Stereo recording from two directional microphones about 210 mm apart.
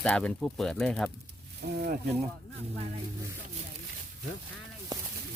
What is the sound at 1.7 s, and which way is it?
Speech, 50° right (ahead or behind).